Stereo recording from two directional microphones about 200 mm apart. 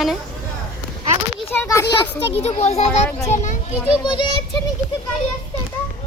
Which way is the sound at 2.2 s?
30° left (ahead or behind).